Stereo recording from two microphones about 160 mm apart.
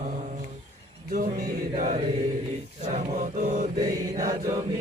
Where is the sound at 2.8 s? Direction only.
45° right (ahead or behind).